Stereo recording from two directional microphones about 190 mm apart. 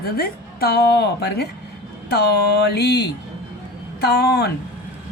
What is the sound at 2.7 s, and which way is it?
A woman's voice, 60° left (ahead or behind).